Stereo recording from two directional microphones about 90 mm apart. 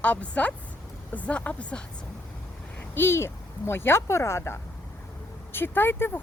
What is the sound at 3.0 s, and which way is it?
Speech, 25° left (ahead or behind).